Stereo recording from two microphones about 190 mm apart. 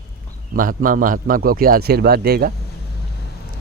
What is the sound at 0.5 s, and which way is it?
Speech, 45° right (ahead or behind).